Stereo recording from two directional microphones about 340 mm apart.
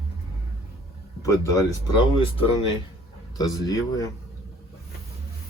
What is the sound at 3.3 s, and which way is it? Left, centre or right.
Speech, centre.